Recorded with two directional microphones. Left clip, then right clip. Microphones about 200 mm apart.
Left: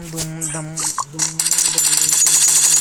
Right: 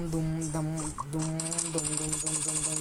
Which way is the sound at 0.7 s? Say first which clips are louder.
Left 11 dB; 40° left (ahead or behind).